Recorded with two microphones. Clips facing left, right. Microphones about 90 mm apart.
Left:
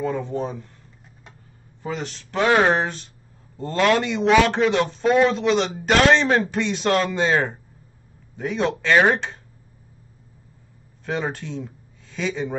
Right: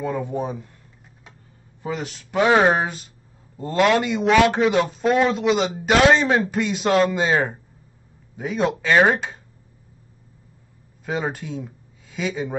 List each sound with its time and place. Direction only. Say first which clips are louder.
0.0 s speech: even; 10° right (ahead or behind)
1.8 s a man's voice: right 1 dB; 10° right (ahead or behind)
11.1 s speech: right 1 dB; 5° right (ahead or behind)